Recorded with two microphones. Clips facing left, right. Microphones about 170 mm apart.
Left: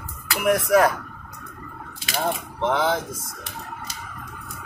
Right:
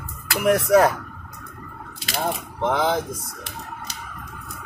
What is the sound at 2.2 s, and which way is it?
Speech, 10° right (ahead or behind).